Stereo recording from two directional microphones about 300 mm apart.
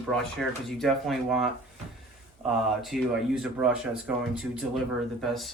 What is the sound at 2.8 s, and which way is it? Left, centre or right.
Speech, centre.